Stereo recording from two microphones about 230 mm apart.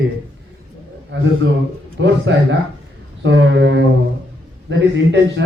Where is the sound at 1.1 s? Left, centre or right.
Right.